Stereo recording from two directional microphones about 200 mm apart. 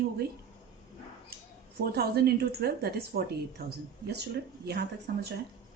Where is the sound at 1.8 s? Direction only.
50° right (ahead or behind).